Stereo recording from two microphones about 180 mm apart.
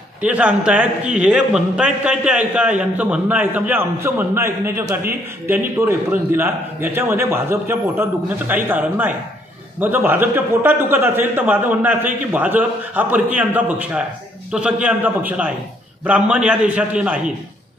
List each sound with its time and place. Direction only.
0.2 s a man's voice: 5° right (ahead or behind)